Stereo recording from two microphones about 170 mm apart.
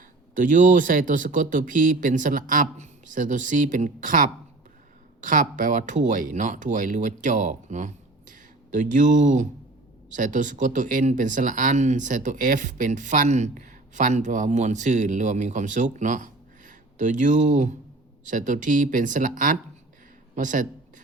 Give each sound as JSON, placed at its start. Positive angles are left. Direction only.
{"t": 0.3, "sound": "speech", "side_deg": -50}